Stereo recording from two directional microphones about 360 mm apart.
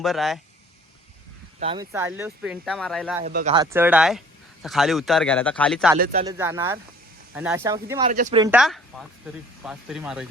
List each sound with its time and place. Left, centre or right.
0.0 s speech: centre
1.5 s speech: centre
3.2 s speech: centre
6.0 s speech: right
6.2 s speech: centre
8.0 s speech: right
8.5 s speech: centre